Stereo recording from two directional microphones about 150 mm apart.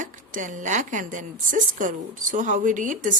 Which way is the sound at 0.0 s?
60° right (ahead or behind).